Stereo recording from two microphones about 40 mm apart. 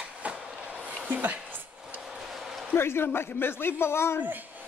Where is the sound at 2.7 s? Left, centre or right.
Left.